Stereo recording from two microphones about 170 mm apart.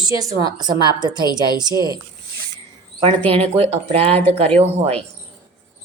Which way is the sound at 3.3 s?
35° right (ahead or behind).